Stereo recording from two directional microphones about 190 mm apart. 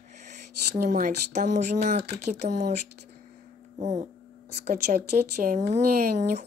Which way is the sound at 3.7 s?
35° right (ahead or behind).